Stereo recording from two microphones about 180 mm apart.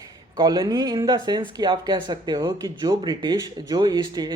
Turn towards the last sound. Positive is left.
turn(degrees=-20)  # may be behind; listen again after turning